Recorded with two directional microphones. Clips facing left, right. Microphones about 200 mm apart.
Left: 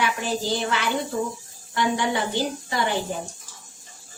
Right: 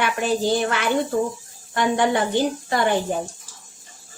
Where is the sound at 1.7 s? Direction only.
55° right (ahead or behind).